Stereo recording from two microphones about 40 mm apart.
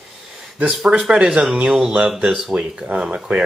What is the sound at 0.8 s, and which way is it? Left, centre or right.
Speech, right.